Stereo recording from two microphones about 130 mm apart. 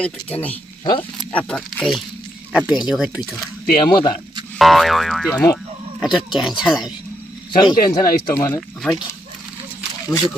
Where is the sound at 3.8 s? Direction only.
30° left (ahead or behind).